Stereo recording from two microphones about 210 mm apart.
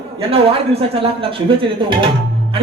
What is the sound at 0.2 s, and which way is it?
Speech, 30° right (ahead or behind).